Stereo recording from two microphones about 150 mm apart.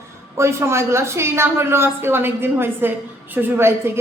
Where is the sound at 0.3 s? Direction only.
20° right (ahead or behind).